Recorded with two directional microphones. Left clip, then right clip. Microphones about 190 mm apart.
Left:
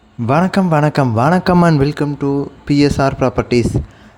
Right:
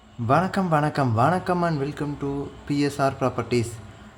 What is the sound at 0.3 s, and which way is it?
A man's voice, 40° left (ahead or behind).